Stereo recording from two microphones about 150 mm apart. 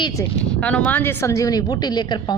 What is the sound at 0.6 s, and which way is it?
A woman's voice, 5° left (ahead or behind).